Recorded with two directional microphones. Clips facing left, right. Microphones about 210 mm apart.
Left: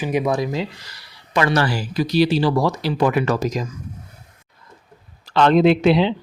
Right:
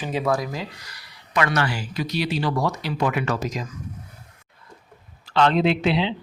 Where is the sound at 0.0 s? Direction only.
15° left (ahead or behind); by 3.7 s 40° left (ahead or behind).